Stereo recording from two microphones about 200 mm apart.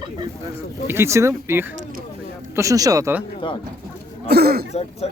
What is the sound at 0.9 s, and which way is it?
Speech, 15° right (ahead or behind).